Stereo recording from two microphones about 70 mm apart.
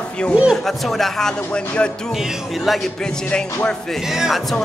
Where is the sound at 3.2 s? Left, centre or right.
Centre.